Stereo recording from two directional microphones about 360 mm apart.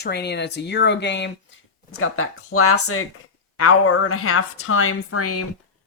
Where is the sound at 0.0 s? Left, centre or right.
Left.